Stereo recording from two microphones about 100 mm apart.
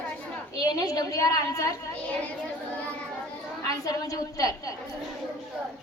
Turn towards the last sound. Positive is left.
turn(degrees=35)  # may be behind; listen again after turning